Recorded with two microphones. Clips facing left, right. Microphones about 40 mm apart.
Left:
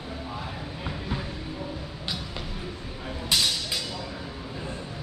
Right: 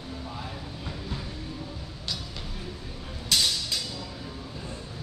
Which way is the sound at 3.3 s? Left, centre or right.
Centre.